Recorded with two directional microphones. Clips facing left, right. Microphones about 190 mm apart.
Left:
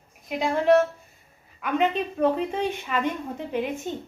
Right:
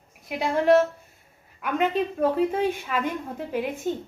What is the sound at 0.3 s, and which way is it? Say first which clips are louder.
Speech: even; 5° right (ahead or behind).